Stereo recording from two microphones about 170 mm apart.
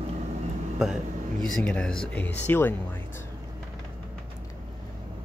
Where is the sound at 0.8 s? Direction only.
Centre (ahead or behind).